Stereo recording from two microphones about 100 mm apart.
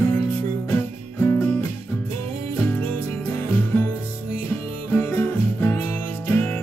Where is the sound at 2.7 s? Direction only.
15° left (ahead or behind).